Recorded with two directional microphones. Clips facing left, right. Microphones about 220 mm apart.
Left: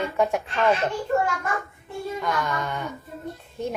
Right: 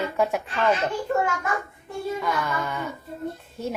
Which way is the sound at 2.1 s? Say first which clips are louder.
Left 2 dB; centre (ahead or behind).